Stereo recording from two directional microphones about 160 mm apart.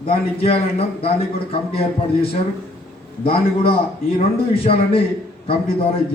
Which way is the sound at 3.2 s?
35° left (ahead or behind).